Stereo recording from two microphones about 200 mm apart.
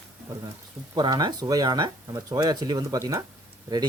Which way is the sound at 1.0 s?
20° right (ahead or behind).